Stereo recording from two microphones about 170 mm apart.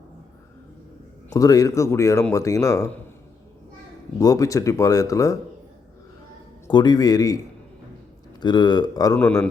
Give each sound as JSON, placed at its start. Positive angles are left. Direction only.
{"t": 1.3, "sound": "speech", "side_deg": 20}
{"t": 4.2, "sound": "speech", "side_deg": 20}
{"t": 6.7, "sound": "speech", "side_deg": 25}
{"t": 9.1, "sound": "speech", "side_deg": 5}